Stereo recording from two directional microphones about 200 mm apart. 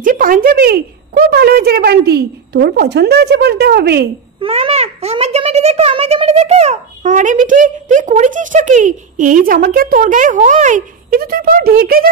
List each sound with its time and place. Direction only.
0.0 s speech: 40° right (ahead or behind)
4.4 s a child's voice: 30° right (ahead or behind); by 12.1 s 45° right (ahead or behind)